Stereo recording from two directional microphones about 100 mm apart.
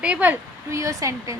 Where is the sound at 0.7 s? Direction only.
30° right (ahead or behind).